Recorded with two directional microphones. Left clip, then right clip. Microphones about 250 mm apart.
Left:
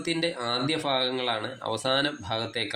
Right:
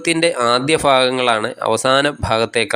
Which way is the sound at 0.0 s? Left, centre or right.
Right.